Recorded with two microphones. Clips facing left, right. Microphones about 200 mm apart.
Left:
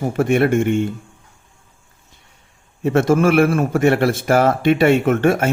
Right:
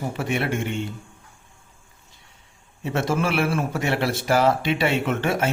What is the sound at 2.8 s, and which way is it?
Speech, 50° left (ahead or behind).